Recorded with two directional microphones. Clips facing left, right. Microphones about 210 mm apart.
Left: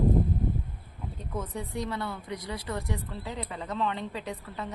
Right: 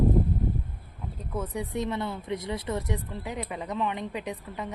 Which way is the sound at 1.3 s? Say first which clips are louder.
Right 3 dB; 10° right (ahead or behind).